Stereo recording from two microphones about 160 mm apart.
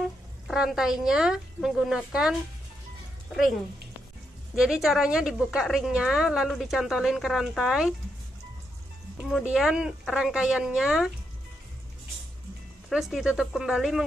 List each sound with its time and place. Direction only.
0.5 s a woman's voice: centre (ahead or behind)
4.6 s a woman's voice: 5° right (ahead or behind)
9.2 s a woman's voice: 5° right (ahead or behind)
12.9 s a woman's voice: centre (ahead or behind)